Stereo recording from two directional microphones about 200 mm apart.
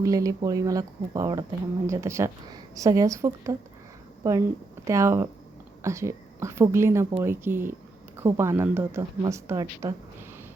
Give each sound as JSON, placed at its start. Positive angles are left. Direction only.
{"t": 0.0, "sound": "a woman's voice", "side_deg": -15}